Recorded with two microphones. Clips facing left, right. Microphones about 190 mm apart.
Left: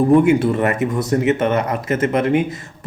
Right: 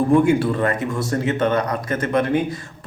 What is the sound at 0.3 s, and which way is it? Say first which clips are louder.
A man's voice: left 3 dB; 20° left (ahead or behind).